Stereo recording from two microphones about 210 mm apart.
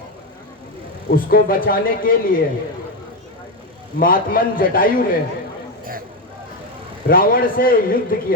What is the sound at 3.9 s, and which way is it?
A man's voice, 45° left (ahead or behind).